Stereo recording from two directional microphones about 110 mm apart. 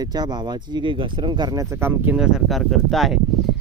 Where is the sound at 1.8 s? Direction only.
20° right (ahead or behind).